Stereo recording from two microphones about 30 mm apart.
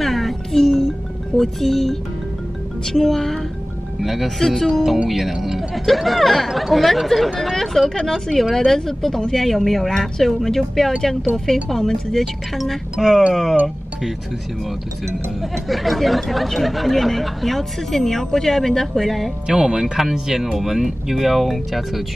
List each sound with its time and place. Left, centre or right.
0.0 s music: centre
1.3 s speech: centre
4.0 s speech: centre
4.4 s speech: centre
4.8 s speech: centre
5.4 s a sound: centre
5.9 s speech: centre
9.8 s speech: centre
15.7 s speech: centre
19.4 s speech: right; by 22.0 s centre